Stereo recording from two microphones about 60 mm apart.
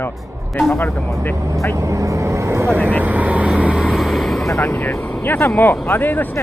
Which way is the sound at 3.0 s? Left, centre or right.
Right.